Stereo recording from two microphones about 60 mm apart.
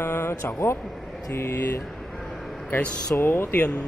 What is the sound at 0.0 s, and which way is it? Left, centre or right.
Speech, left.